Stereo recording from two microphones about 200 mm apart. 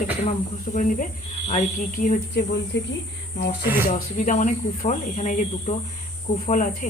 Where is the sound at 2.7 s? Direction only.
60° left (ahead or behind).